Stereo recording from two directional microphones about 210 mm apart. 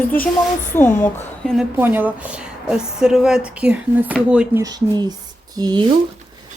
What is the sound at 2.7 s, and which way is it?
Speech, 5° right (ahead or behind).